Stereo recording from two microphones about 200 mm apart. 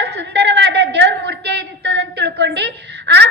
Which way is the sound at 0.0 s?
55° right (ahead or behind).